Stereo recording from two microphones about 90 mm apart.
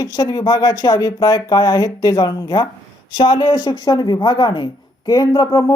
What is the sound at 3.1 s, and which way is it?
Speech, 70° left (ahead or behind).